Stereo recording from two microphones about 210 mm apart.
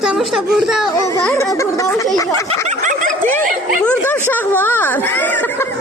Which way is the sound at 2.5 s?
35° right (ahead or behind).